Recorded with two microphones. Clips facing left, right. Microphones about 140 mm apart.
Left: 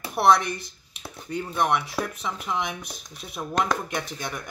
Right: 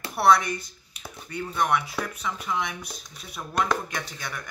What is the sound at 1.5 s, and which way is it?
Speech, 25° left (ahead or behind).